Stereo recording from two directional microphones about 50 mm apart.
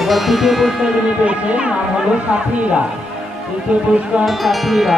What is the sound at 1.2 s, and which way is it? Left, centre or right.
Speech, right.